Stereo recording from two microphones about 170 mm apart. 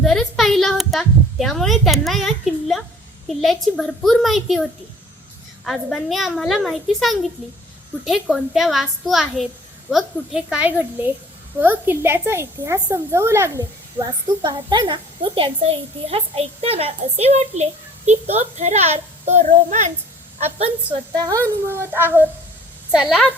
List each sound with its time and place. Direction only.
0.0 s a woman's voice: centre (ahead or behind); by 19.9 s 45° right (ahead or behind)
20.4 s a woman's voice: 30° right (ahead or behind)
21.7 s a woman's voice: 15° right (ahead or behind)